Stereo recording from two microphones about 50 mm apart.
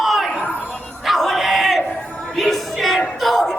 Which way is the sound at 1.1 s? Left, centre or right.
Centre.